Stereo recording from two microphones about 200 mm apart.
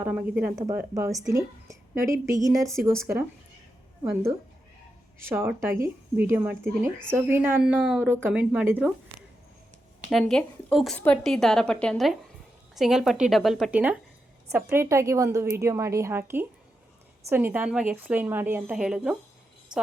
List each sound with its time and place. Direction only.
0.0 s a woman's voice: 10° right (ahead or behind)
4.0 s a woman's voice: 10° right (ahead or behind)
10.1 s a woman's voice: centre (ahead or behind)
19.7 s a sound: 5° right (ahead or behind)